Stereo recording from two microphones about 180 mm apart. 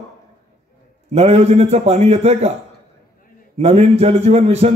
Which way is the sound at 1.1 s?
35° right (ahead or behind).